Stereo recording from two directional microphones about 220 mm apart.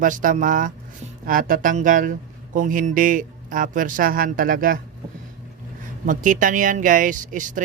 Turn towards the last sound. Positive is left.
turn(degrees=-35)  # may be behind; listen again after turning